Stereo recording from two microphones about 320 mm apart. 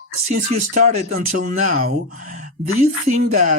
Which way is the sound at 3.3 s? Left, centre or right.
Right.